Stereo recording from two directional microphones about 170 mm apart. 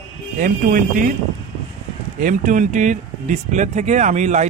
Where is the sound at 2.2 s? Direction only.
50° right (ahead or behind).